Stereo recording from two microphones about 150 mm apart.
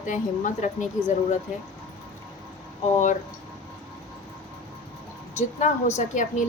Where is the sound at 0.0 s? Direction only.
55° left (ahead or behind).